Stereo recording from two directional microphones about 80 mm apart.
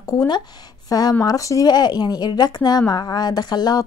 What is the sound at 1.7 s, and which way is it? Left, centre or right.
A woman's voice, left.